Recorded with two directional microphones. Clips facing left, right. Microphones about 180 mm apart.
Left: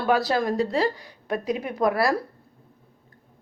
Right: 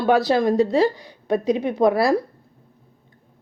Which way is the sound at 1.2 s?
25° right (ahead or behind).